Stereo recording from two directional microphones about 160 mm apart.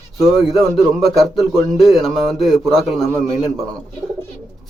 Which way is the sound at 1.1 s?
Centre (ahead or behind).